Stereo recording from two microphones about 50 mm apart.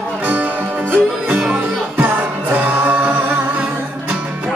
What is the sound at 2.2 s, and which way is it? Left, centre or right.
A capella, right.